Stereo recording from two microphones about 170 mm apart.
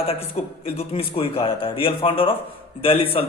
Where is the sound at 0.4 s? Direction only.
40° left (ahead or behind).